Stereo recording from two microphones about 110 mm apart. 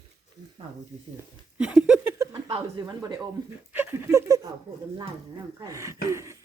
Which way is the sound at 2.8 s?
40° right (ahead or behind).